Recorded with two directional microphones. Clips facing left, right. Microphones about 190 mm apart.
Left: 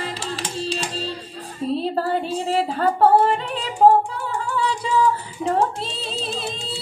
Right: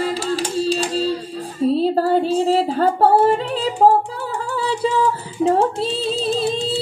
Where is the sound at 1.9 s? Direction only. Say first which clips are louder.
Right 6 dB; 30° right (ahead or behind).